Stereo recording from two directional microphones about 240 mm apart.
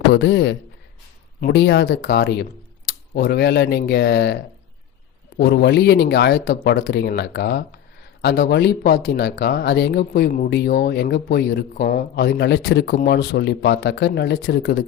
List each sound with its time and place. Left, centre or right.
0.1 s speech: left
5.4 s speech: left